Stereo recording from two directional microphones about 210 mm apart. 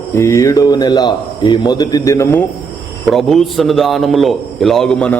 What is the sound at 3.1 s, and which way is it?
A man's voice, centre (ahead or behind).